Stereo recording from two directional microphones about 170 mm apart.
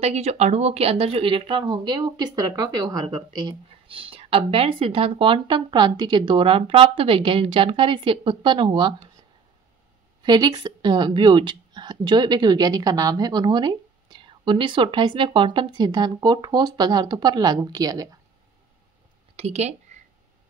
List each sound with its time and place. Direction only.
0.0 s speech: 40° right (ahead or behind)
10.2 s speech: 25° right (ahead or behind)
19.3 s a sound: 40° right (ahead or behind)